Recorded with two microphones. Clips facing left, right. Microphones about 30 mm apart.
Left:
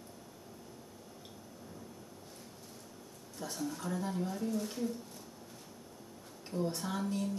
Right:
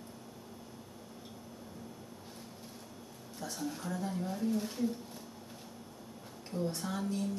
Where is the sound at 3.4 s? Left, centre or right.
Centre.